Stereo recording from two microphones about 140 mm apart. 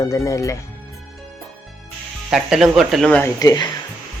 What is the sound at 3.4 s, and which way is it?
Speech, 25° left (ahead or behind).